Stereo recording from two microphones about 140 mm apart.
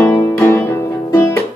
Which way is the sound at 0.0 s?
15° left (ahead or behind).